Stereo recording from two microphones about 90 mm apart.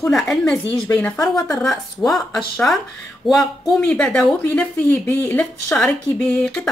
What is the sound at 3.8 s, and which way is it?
Speech, 10° left (ahead or behind).